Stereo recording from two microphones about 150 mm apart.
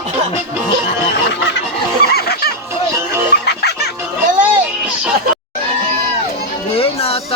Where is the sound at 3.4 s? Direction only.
90° left.